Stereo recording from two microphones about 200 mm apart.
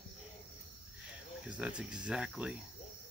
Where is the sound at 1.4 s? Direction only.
5° right (ahead or behind).